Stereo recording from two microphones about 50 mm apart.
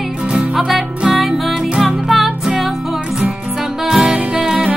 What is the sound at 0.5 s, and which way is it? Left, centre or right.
Music, centre.